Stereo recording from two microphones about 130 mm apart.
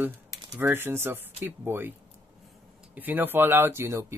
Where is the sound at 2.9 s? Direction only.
15° right (ahead or behind).